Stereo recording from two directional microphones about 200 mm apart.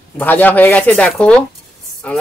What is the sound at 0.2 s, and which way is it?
A woman's voice, 10° left (ahead or behind).